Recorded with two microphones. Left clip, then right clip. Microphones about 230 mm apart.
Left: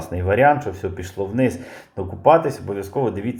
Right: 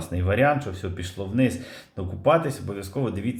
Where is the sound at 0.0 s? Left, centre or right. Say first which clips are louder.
Left 6 dB; centre.